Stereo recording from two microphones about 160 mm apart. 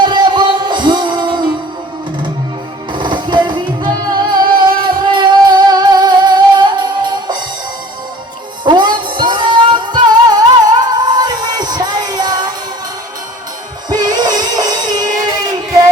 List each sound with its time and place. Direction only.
0.0 s music: 30° right (ahead or behind)
2.9 s music: 30° right (ahead or behind)
8.6 s music: 30° right (ahead or behind)
13.9 s music: 25° right (ahead or behind)